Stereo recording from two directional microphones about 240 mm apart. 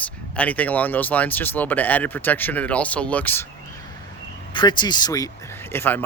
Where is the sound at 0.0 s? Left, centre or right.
Centre.